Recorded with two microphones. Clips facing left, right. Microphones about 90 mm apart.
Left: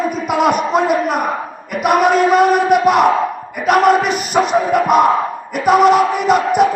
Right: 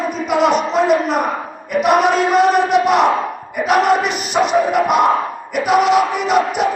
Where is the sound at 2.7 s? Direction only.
Centre (ahead or behind).